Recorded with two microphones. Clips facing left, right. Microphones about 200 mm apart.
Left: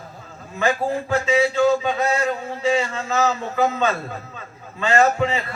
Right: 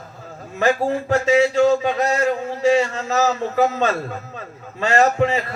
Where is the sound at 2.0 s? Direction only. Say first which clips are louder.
Right 2 dB; 45° right (ahead or behind).